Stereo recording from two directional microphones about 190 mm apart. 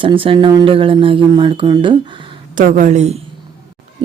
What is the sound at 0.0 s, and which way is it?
Speech, 25° right (ahead or behind).